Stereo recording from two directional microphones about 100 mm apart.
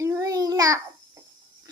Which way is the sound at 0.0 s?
30° right (ahead or behind).